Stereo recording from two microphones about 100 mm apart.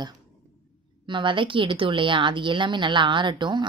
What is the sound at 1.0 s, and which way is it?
A woman's voice, 55° right (ahead or behind).